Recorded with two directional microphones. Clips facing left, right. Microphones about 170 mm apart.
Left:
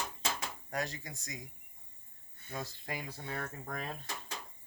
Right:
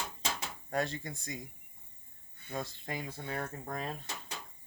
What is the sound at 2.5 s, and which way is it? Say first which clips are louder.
Speech: right 2 dB; 25° right (ahead or behind).